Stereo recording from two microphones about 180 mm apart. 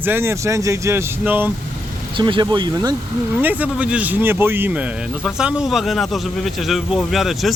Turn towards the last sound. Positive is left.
turn(degrees=0)  # may be behind; listen again after turning